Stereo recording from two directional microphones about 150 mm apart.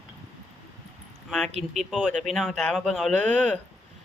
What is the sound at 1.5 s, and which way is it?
Speech, 45° right (ahead or behind).